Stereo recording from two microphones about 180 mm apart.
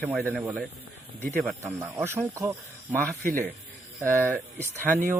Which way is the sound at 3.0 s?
5° left (ahead or behind).